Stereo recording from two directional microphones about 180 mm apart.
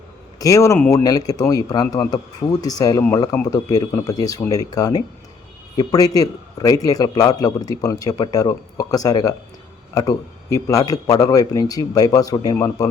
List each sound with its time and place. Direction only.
0.3 s a man's voice: 20° left (ahead or behind)